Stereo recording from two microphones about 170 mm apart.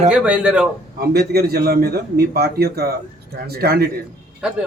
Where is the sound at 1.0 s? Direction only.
65° right (ahead or behind).